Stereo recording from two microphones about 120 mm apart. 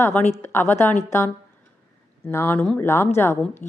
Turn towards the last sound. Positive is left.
turn(degrees=20)  # may be behind; listen again after turning